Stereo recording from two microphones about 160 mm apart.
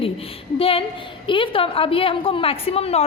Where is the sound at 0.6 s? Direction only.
35° left (ahead or behind).